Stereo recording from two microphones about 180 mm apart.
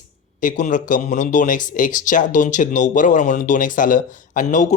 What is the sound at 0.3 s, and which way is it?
Speech, 45° left (ahead or behind).